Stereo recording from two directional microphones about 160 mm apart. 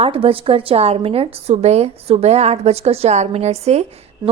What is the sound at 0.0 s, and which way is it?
A woman's voice, 35° right (ahead or behind).